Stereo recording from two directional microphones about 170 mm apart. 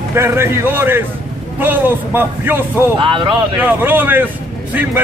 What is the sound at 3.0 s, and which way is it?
Speech, 30° right (ahead or behind).